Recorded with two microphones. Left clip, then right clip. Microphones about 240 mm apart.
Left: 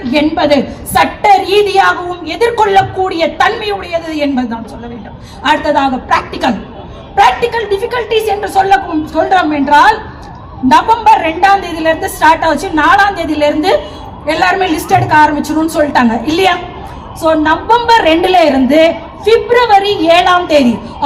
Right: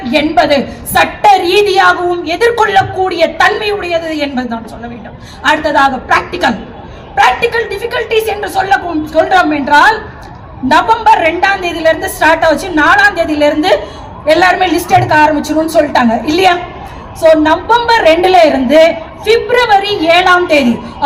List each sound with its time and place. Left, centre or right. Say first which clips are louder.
0.1 s a woman's voice: right 1 dB; right
7.5 s a woman's voice: left 1 dB; right